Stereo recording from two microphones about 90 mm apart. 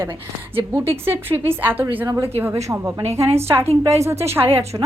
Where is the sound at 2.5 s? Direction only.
35° right (ahead or behind).